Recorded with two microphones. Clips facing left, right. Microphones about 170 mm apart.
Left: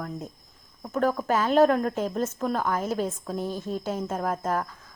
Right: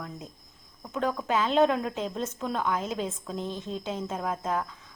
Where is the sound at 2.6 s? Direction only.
40° left (ahead or behind).